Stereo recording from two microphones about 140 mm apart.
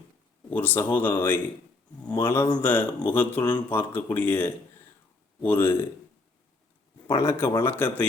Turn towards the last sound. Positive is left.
turn(degrees=15)  # may be behind; listen again after turning